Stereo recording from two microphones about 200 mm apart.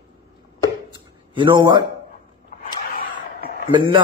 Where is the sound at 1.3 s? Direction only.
25° right (ahead or behind).